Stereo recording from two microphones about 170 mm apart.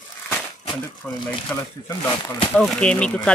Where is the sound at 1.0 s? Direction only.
5° left (ahead or behind).